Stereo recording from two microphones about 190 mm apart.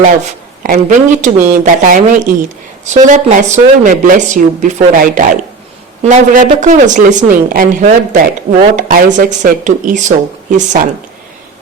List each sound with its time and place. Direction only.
0.0 s a woman's voice: 45° right (ahead or behind)